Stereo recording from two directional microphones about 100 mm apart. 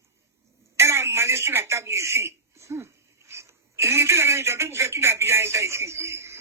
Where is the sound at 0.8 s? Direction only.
25° right (ahead or behind).